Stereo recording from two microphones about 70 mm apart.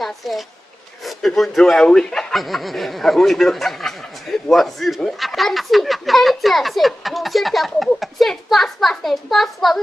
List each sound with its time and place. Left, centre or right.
0.0 s speech: centre